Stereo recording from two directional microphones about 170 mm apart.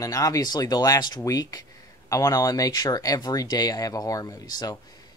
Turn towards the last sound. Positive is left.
turn(degrees=20)  # may be behind; listen again after turning